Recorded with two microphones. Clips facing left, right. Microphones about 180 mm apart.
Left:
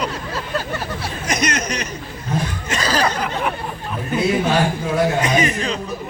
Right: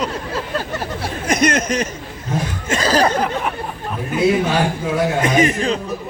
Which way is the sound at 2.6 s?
45° right (ahead or behind).